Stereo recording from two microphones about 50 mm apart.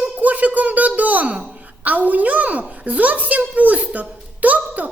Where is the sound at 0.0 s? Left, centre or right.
Right.